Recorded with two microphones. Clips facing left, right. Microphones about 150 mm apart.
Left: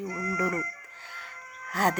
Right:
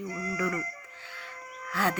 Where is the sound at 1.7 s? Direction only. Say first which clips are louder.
Left 3 dB; 45° left (ahead or behind).